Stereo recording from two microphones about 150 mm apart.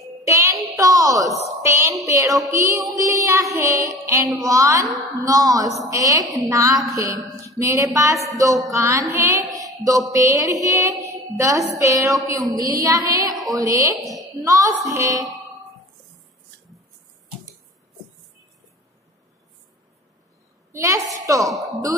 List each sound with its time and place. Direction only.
0.2 s child singing: 20° right (ahead or behind)
0.7 s a sound: 25° right (ahead or behind)
1.6 s a woman's voice: 20° right (ahead or behind)
20.7 s a woman's voice: 20° right (ahead or behind)